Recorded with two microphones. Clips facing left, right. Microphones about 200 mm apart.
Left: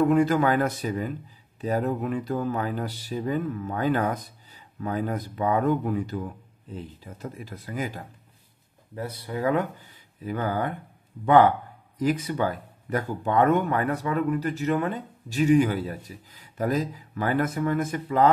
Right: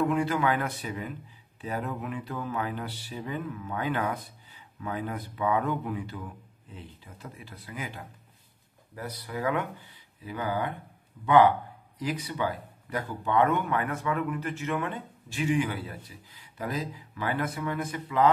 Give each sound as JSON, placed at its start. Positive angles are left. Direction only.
{"t": 0.1, "sound": "a man's voice", "side_deg": 45}
{"t": 8.9, "sound": "speech", "side_deg": 25}
{"t": 10.2, "sound": "speech", "side_deg": 50}